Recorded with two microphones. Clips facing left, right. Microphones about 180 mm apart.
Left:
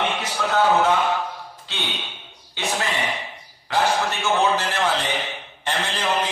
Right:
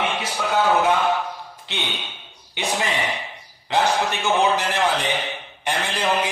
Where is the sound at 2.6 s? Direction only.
15° right (ahead or behind).